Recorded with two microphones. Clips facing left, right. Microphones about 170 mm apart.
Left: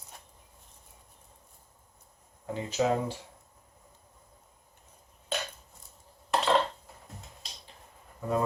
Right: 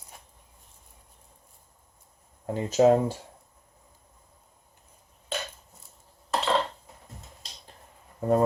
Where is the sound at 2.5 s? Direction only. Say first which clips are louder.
Right 8 dB; 45° right (ahead or behind).